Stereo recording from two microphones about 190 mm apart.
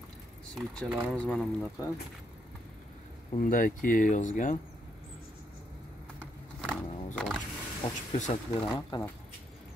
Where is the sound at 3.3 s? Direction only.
45° left (ahead or behind).